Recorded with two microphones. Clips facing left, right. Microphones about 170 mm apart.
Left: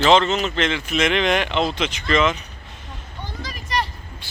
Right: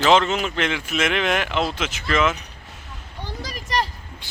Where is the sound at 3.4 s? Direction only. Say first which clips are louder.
Right 1 dB; 40° right (ahead or behind).